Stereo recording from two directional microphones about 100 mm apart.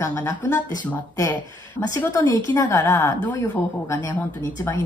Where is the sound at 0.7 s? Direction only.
35° left (ahead or behind).